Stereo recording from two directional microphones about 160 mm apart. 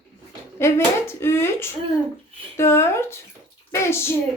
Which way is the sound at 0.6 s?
15° left (ahead or behind).